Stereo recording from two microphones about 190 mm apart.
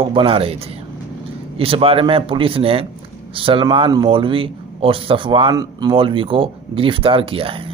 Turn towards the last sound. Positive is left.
turn(degrees=-30)  # may be behind; listen again after turning